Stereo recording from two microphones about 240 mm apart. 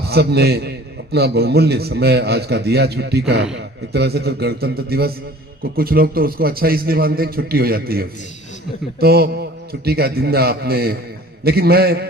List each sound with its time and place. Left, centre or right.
0.1 s a man's voice: right